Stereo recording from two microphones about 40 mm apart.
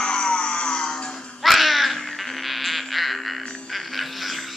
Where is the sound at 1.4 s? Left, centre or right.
Centre.